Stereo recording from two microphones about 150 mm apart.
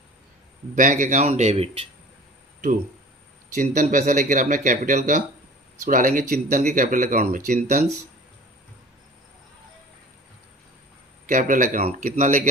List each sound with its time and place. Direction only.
0.8 s speech: 60° right (ahead or behind); by 1.8 s 40° right (ahead or behind)
3.5 s speech: 60° right (ahead or behind)
11.3 s speech: 60° right (ahead or behind)